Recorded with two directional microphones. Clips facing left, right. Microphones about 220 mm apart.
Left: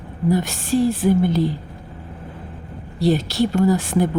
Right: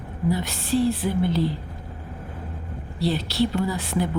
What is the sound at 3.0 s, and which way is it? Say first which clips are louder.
Music: left 5 dB; 45° left (ahead or behind).